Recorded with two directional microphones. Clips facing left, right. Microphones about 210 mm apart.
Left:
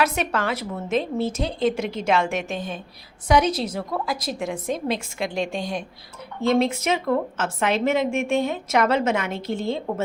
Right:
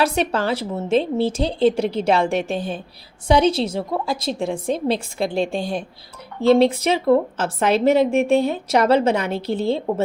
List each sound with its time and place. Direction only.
0.0 s a woman's voice: 30° right (ahead or behind)